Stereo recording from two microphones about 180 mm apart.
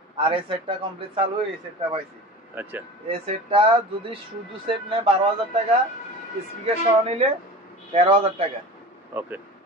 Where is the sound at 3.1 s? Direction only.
30° right (ahead or behind).